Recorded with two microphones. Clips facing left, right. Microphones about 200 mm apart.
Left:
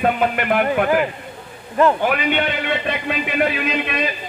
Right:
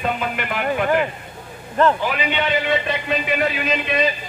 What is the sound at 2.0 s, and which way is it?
Speech, 55° left (ahead or behind).